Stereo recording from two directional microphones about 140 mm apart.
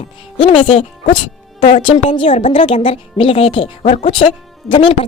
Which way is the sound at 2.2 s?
60° left (ahead or behind).